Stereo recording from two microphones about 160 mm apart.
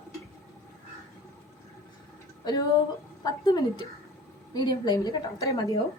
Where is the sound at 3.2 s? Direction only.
25° left (ahead or behind).